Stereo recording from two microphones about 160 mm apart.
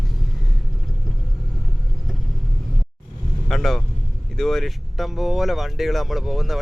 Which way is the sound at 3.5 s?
Centre (ahead or behind).